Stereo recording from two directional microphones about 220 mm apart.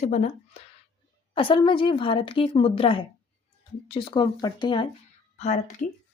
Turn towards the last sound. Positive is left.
turn(degrees=35)  # may be behind; listen again after turning